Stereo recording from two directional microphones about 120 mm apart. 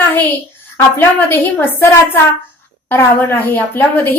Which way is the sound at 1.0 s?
15° left (ahead or behind).